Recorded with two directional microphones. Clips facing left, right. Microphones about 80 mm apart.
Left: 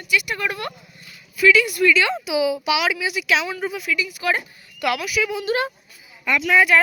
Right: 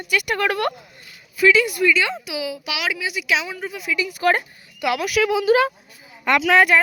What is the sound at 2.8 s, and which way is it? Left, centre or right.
Speech, centre.